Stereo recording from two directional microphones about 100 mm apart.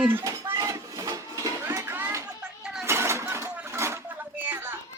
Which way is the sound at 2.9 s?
25° right (ahead or behind).